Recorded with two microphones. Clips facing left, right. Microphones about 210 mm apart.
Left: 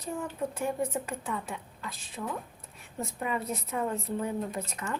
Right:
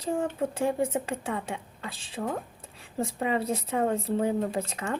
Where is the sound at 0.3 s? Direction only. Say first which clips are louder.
Right 4 dB; 25° right (ahead or behind).